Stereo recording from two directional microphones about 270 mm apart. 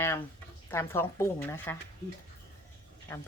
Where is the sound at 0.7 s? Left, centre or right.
Centre.